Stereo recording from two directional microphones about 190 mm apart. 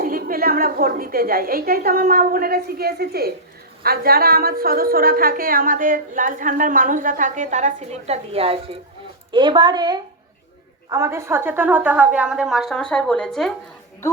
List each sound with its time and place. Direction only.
0.0 s a woman's voice: 50° right (ahead or behind); by 13.5 s 5° left (ahead or behind)